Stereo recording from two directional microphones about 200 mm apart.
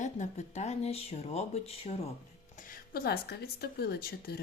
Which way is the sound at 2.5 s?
45° left (ahead or behind).